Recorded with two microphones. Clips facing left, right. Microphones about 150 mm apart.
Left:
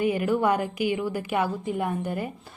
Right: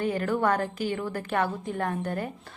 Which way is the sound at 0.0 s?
10° left (ahead or behind).